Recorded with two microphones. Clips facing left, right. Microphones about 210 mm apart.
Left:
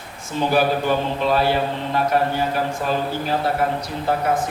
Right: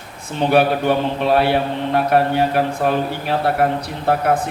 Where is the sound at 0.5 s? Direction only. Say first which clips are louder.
Right 4 dB; 65° right (ahead or behind).